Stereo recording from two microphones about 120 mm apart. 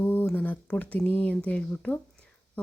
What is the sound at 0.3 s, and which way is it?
A woman's voice, 15° left (ahead or behind).